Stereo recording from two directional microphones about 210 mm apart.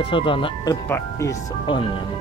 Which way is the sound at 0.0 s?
25° left (ahead or behind).